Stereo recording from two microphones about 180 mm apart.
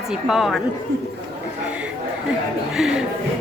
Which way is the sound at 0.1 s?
Centre (ahead or behind).